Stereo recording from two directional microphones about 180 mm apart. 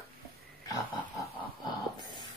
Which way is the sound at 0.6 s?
20° left (ahead or behind).